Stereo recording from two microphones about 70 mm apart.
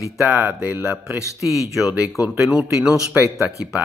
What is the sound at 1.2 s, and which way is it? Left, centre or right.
Speech, left.